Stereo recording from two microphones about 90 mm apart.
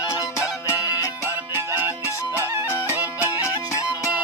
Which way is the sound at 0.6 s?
40° left (ahead or behind).